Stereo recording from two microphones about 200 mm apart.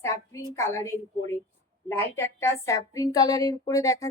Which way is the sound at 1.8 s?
15° left (ahead or behind).